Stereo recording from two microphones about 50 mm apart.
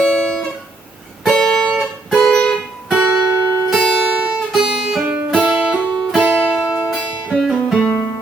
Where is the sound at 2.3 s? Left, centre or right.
Centre.